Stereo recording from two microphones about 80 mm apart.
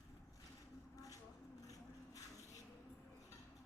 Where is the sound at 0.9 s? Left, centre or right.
Left.